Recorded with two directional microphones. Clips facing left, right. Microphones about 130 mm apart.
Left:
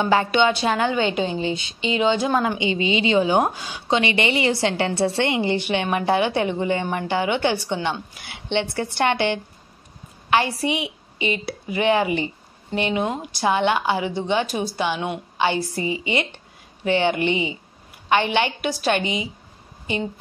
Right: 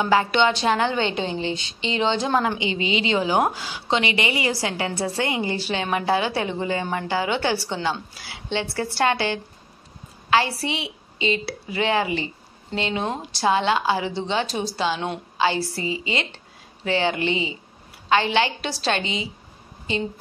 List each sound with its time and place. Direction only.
0.0 s a woman's voice: 25° left (ahead or behind)
0.3 s a woman's voice: 15° left (ahead or behind)